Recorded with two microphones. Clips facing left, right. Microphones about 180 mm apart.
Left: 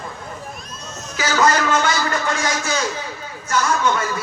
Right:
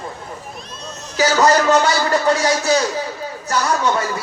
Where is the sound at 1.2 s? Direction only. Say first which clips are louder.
Right 4 dB; 35° right (ahead or behind).